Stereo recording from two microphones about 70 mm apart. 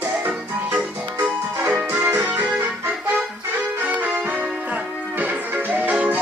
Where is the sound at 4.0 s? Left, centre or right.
Right.